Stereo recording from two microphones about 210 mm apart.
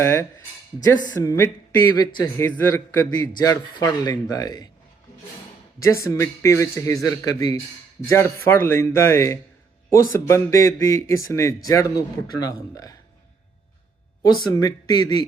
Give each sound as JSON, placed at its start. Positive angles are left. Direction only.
{"t": 0.0, "sound": "speech", "side_deg": 15}
{"t": 5.8, "sound": "speech", "side_deg": 15}
{"t": 14.5, "sound": "speech", "side_deg": 20}